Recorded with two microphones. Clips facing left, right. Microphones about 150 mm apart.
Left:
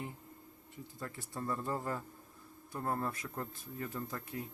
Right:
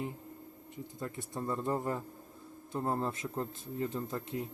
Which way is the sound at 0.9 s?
20° right (ahead or behind).